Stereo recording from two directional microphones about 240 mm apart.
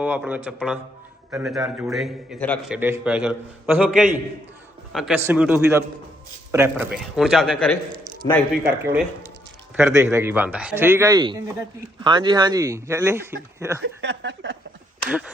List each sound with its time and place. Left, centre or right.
0.0 s a man's voice: centre
13.8 s speech: right